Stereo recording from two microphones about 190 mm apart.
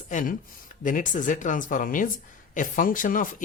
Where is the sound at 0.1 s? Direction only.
45° left (ahead or behind).